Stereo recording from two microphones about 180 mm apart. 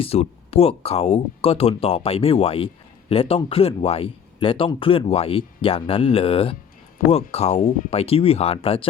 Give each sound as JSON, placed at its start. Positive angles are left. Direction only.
{"t": 0.0, "sound": "speech", "side_deg": 35}